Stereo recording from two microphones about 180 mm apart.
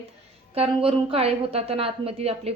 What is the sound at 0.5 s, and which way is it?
A woman's voice, 35° right (ahead or behind).